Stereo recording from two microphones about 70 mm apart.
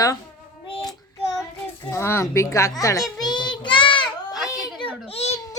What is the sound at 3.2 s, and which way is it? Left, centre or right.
Child singing, left.